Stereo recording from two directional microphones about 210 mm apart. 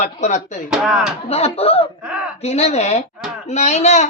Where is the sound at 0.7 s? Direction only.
Centre (ahead or behind).